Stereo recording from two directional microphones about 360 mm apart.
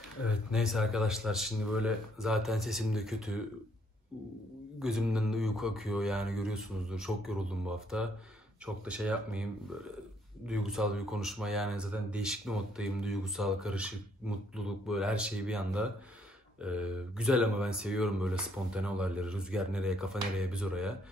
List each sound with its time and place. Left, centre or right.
0.5 s speech: centre
4.7 s speech: centre